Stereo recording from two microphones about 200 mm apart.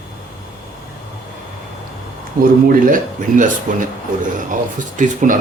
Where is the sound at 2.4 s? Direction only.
45° right (ahead or behind).